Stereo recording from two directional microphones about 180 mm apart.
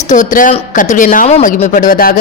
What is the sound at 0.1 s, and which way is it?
Speech, 45° left (ahead or behind).